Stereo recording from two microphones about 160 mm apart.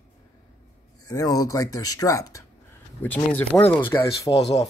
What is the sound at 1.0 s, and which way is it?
Speech, 25° left (ahead or behind).